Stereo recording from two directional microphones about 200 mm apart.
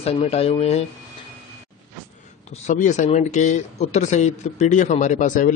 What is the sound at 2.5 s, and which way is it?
Speech, 35° left (ahead or behind).